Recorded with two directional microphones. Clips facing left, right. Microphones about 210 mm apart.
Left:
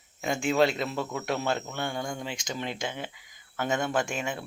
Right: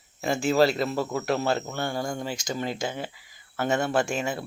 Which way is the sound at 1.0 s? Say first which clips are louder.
Right 4 dB; 35° right (ahead or behind).